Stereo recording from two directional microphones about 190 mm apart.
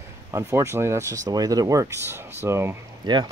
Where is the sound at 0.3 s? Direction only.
15° right (ahead or behind).